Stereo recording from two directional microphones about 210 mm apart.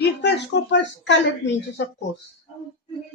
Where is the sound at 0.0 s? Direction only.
55° left (ahead or behind).